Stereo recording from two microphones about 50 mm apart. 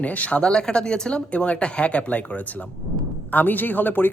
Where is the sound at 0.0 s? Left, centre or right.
Left.